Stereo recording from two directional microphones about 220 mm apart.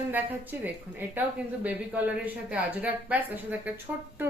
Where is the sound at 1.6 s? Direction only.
5° right (ahead or behind).